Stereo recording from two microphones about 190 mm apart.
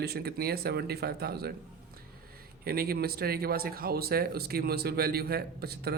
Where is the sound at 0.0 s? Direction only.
55° right (ahead or behind).